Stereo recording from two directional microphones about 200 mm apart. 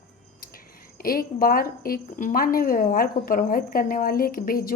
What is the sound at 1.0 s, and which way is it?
A woman's voice, 45° left (ahead or behind).